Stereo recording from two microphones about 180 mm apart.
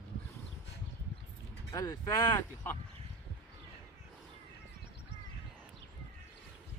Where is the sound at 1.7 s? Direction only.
20° left (ahead or behind).